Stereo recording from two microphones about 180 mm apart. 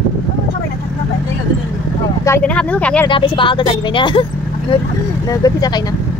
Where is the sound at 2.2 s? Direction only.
10° left (ahead or behind).